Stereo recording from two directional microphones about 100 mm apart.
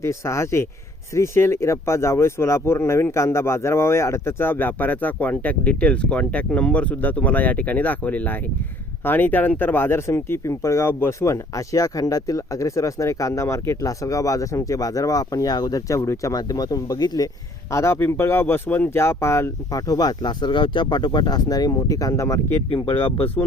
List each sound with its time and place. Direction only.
0.0 s speech: 30° left (ahead or behind)
17.7 s speech: 30° left (ahead or behind)
22.7 s speech: 65° left (ahead or behind)